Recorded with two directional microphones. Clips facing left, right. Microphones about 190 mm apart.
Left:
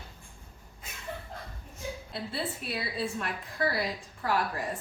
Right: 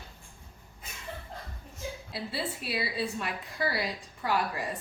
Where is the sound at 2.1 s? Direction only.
Centre (ahead or behind).